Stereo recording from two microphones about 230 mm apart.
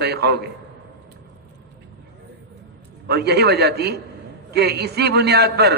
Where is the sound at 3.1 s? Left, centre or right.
Right.